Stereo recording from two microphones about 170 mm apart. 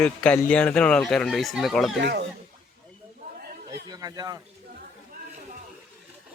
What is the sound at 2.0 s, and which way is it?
Speech, 90° right.